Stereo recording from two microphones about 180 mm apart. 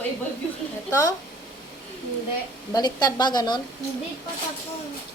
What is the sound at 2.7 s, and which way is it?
Speech, 20° left (ahead or behind).